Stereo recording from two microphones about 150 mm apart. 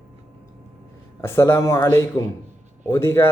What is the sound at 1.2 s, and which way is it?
A man's voice, 15° left (ahead or behind).